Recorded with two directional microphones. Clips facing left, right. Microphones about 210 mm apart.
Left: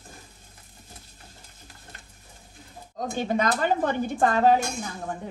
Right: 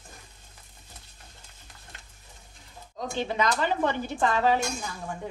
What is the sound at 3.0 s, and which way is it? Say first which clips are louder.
Speech: left 3 dB; 45° left (ahead or behind).